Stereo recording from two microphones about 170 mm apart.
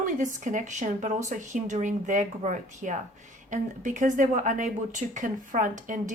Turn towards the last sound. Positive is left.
turn(degrees=-50)  # may be behind; listen again after turning